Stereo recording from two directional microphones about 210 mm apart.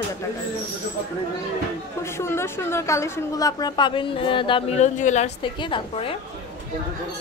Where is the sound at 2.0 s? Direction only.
10° left (ahead or behind).